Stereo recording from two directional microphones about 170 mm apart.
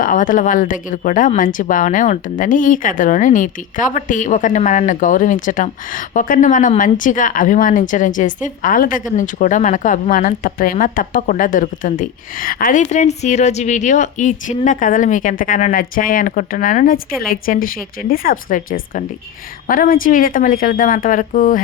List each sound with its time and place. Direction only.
0.0 s speech: 50° left (ahead or behind)